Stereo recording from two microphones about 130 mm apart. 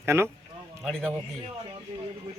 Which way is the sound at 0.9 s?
5° left (ahead or behind).